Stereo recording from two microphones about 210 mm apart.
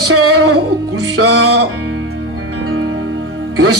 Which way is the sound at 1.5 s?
65° right (ahead or behind).